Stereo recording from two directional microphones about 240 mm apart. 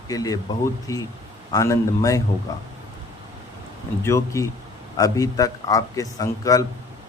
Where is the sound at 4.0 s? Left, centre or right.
Centre.